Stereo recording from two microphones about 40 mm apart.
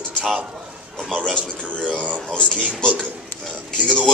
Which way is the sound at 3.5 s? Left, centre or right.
Centre.